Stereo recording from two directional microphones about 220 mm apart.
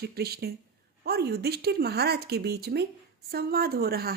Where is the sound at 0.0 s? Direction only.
45° right (ahead or behind).